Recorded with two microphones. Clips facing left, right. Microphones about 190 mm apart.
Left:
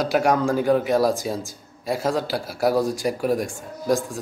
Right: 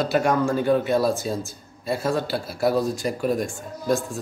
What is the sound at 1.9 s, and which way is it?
Speech, 90° left.